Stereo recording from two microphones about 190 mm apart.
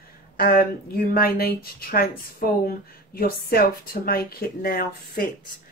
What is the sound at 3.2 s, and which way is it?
Speech, 50° left (ahead or behind).